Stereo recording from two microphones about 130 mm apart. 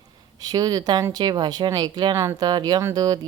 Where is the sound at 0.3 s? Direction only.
30° right (ahead or behind).